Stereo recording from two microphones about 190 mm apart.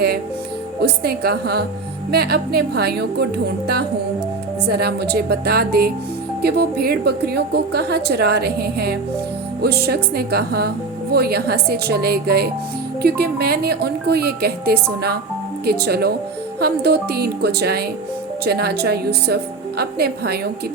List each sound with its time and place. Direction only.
0.8 s a woman's voice: 55° right (ahead or behind)